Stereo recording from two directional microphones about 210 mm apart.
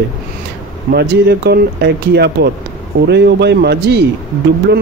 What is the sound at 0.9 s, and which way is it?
Speech, 50° right (ahead or behind).